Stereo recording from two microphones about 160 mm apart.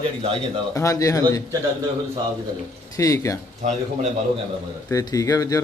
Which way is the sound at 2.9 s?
20° left (ahead or behind).